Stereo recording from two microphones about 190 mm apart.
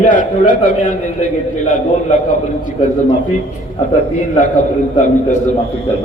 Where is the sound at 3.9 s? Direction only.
40° left (ahead or behind).